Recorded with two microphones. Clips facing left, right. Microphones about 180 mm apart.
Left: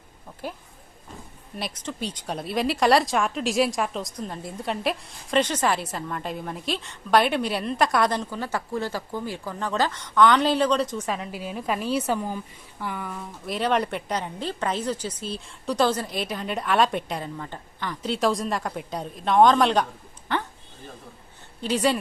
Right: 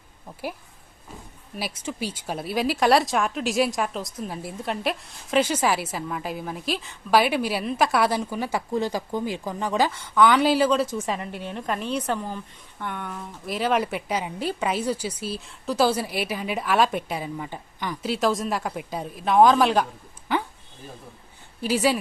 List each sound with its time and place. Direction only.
1.5 s speech: 5° right (ahead or behind)
21.6 s speech: 5° right (ahead or behind)